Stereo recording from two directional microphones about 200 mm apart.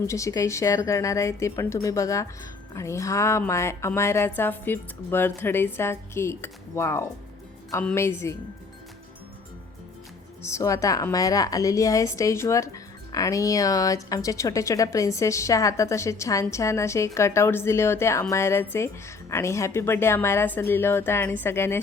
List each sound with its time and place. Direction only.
0.1 s a woman's voice: 15° left (ahead or behind)
10.4 s a woman's voice: 15° left (ahead or behind)